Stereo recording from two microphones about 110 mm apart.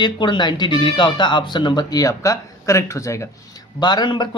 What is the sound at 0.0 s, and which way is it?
Speech, 45° left (ahead or behind).